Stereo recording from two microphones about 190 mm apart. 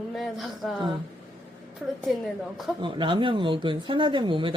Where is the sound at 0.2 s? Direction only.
Centre (ahead or behind).